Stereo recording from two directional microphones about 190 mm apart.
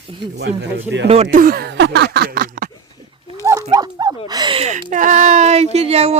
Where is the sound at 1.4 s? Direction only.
50° right (ahead or behind).